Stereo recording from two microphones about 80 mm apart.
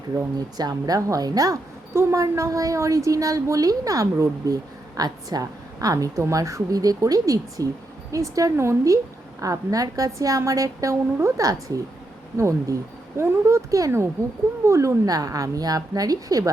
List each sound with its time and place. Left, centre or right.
0.3 s a woman's voice: right
1.9 s a woman's voice: right